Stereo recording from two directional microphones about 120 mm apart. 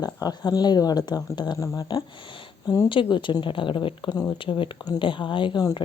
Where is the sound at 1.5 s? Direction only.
25° left (ahead or behind).